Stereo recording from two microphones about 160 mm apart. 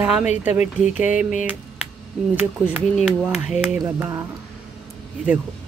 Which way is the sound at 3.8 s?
15° right (ahead or behind).